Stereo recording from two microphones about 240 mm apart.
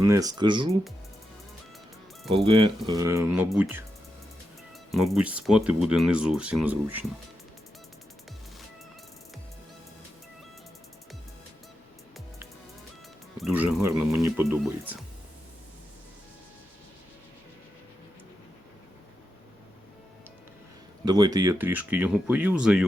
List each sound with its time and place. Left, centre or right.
0.0 s speech: centre
2.3 s speech: right
4.9 s speech: centre
13.3 s speech: centre
21.0 s speech: centre